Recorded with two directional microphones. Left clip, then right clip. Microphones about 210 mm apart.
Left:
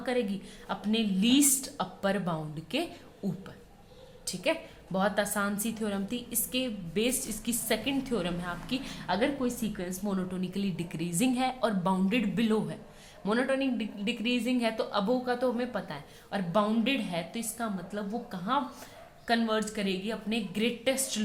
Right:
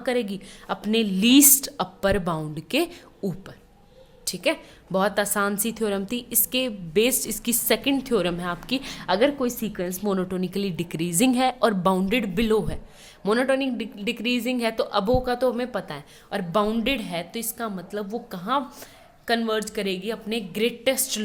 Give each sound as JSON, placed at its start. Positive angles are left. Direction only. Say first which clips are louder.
{"t": 0.0, "sound": "a woman's voice", "louder": "right 5 dB", "side_deg": -50}